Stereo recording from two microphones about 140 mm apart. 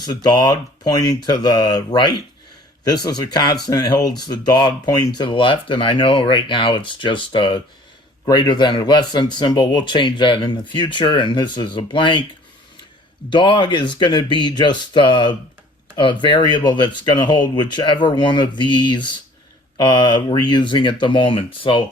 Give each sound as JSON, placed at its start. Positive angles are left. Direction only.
{"t": 0.0, "sound": "speech", "side_deg": 30}
{"t": 13.3, "sound": "speech", "side_deg": 35}